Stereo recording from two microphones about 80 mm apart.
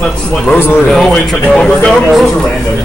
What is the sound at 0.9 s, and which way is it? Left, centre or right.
Speech, centre.